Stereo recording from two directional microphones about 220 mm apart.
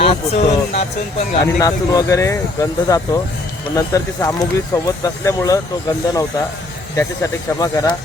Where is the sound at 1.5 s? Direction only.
15° left (ahead or behind).